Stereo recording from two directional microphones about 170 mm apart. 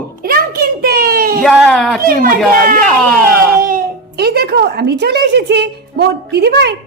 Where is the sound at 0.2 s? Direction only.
60° right (ahead or behind).